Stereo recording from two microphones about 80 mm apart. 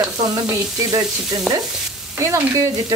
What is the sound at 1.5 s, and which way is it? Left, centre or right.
Stir, centre.